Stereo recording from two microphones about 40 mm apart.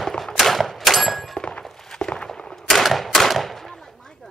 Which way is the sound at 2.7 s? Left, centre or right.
Centre.